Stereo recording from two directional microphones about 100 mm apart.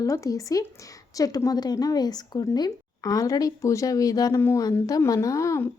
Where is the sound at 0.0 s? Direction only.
35° left (ahead or behind).